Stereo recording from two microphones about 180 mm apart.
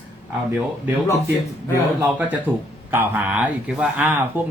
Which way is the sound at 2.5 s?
10° right (ahead or behind).